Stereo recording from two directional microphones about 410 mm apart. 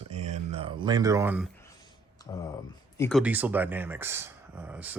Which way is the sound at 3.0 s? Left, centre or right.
Centre.